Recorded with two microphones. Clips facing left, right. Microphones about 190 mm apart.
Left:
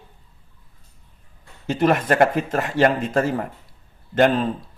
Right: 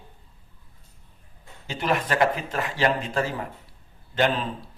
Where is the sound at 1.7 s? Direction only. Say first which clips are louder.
Left 7 dB; 45° left (ahead or behind).